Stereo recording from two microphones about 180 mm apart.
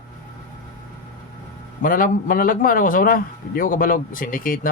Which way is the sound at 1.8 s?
50° left (ahead or behind).